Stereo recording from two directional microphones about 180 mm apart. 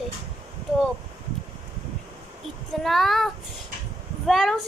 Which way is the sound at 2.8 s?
Centre (ahead or behind).